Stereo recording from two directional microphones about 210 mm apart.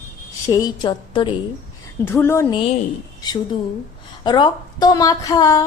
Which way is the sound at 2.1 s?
10° left (ahead or behind).